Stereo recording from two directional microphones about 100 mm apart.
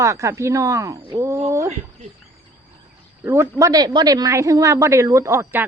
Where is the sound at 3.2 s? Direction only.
30° right (ahead or behind).